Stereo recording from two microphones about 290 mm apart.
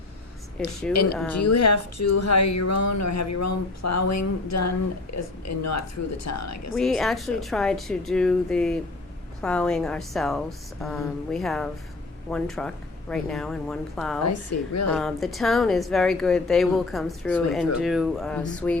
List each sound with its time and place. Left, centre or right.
0.8 s a woman's voice: centre
1.5 s speech: left
6.7 s a woman's voice: centre
14.3 s speech: left
14.8 s a woman's voice: centre